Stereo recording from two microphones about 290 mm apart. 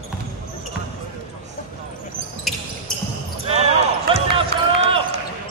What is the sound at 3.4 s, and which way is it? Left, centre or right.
Basketball bounce, right.